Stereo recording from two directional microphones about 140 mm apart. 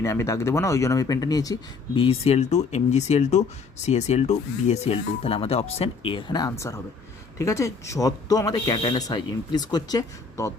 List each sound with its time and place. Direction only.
0.0 s speech: 20° left (ahead or behind)
2.0 s speech: 45° left (ahead or behind); by 10.5 s 25° left (ahead or behind)